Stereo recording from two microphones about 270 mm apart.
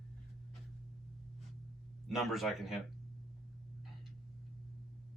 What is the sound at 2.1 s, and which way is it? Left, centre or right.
Speech, centre.